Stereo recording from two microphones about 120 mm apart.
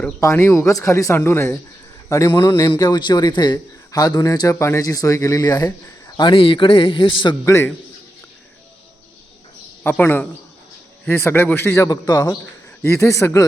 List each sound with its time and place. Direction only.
0.2 s a man's voice: 25° left (ahead or behind)
6.1 s a man's voice: 45° left (ahead or behind)
7.4 s speech: 25° left (ahead or behind)
10.0 s a man's voice: 15° left (ahead or behind)
11.9 s a man's voice: 30° left (ahead or behind)
12.8 s speech: 20° left (ahead or behind)